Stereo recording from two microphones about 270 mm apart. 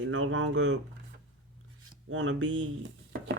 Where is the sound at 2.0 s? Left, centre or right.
Right.